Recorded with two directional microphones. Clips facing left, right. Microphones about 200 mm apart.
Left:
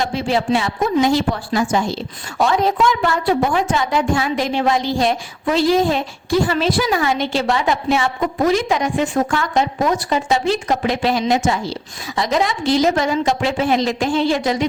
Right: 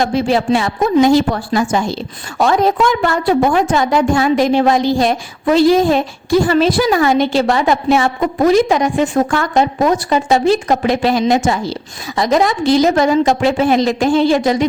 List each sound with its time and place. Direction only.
0.0 s a woman's voice: 45° right (ahead or behind)